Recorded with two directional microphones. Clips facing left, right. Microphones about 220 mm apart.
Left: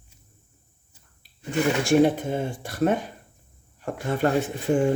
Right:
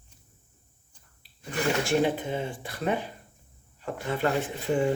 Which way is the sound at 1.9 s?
45° left (ahead or behind).